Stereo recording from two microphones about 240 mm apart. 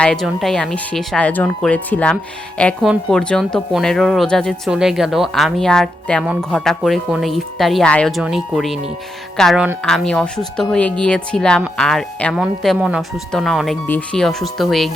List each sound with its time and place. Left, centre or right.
0.0 s speech: centre